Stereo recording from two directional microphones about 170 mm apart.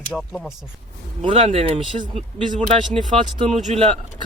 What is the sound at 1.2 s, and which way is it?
Speech, 35° right (ahead or behind).